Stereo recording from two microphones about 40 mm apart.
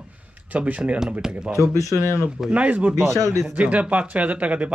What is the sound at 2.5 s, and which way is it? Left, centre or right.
Speech, right.